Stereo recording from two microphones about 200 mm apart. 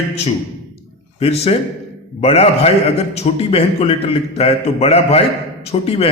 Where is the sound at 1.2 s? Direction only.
30° left (ahead or behind).